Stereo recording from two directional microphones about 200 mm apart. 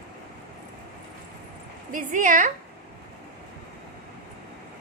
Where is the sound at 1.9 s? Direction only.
40° right (ahead or behind).